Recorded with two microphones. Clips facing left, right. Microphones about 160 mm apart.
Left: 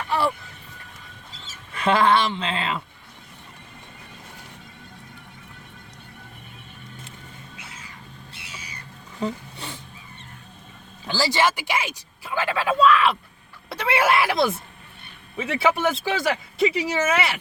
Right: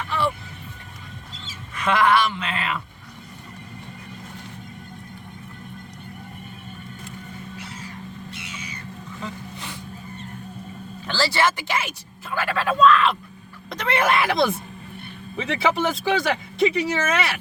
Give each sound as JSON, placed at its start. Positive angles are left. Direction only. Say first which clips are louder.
{"t": 1.7, "sound": "a woman's voice", "louder": "even", "side_deg": 30}
{"t": 8.3, "sound": "owl", "louder": "right 6 dB", "side_deg": 35}
{"t": 9.2, "sound": "a sound", "louder": "left 7 dB", "side_deg": 30}
{"t": 11.0, "sound": "speech", "louder": "even", "side_deg": 15}